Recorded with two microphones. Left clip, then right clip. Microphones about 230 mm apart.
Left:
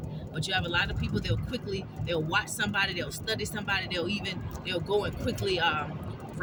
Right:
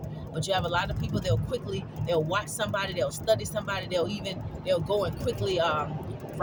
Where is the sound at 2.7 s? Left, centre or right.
Right.